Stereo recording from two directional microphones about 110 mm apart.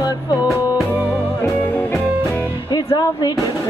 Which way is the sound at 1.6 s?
20° left (ahead or behind).